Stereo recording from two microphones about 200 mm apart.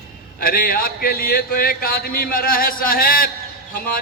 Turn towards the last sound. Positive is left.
turn(degrees=45)  # may be behind; listen again after turning